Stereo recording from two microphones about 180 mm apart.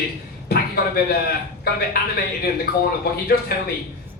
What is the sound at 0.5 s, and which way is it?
Speech, 55° left (ahead or behind).